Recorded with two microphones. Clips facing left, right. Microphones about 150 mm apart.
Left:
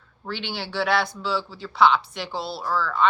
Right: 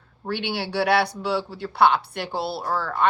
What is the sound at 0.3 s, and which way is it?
Speech, 60° right (ahead or behind).